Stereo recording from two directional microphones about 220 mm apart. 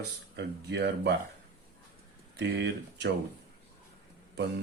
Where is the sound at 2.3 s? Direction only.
50° right (ahead or behind).